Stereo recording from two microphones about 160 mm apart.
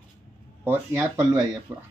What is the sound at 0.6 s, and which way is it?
Speech, 15° right (ahead or behind).